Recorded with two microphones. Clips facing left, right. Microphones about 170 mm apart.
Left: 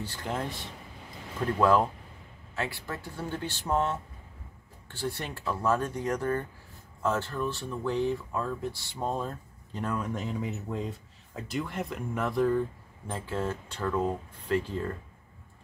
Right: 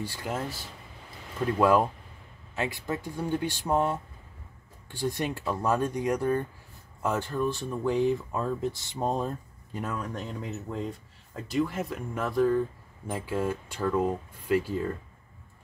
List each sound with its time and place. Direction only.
0.0 s speech: 10° right (ahead or behind)
9.9 s speech: centre (ahead or behind)